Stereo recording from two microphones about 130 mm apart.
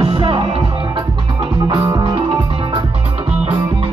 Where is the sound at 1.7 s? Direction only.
35° right (ahead or behind).